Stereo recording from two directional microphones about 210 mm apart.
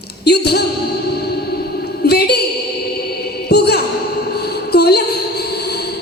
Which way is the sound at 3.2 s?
50° left (ahead or behind).